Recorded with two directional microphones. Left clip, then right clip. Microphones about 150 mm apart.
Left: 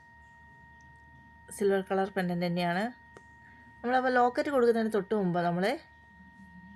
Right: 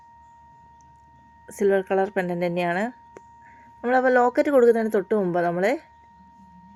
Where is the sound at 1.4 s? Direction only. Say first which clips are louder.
Right 7 dB; 20° right (ahead or behind).